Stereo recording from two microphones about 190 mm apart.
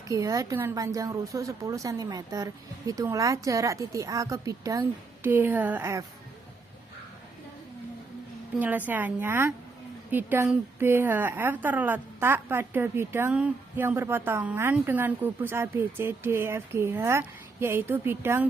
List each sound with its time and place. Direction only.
0.1 s a woman's voice: 15° right (ahead or behind)
8.5 s a woman's voice: 10° right (ahead or behind)